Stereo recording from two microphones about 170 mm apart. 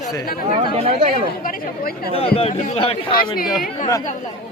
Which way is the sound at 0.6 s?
35° right (ahead or behind).